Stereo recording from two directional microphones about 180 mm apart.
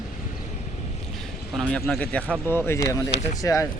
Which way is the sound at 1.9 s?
10° left (ahead or behind).